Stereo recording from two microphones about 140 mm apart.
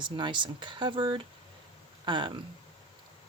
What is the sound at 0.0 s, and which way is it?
Speech, 35° right (ahead or behind).